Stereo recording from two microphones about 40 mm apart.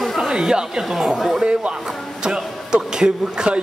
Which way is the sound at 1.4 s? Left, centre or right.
Right.